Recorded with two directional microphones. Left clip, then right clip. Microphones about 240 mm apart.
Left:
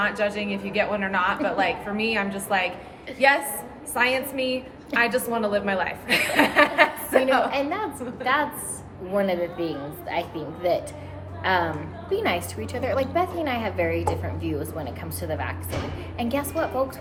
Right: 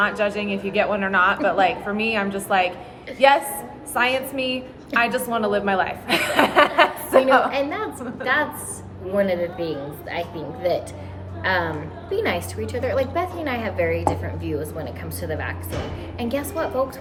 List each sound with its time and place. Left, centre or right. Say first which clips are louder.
0.2 s a woman's voice: right 3 dB; centre
7.5 s a woman's voice: right 2 dB; centre